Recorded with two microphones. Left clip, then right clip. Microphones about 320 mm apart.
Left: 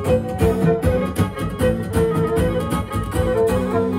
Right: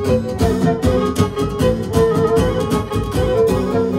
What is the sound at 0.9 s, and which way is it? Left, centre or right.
Music, centre.